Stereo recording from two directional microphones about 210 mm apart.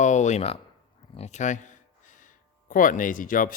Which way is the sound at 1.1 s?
30° left (ahead or behind).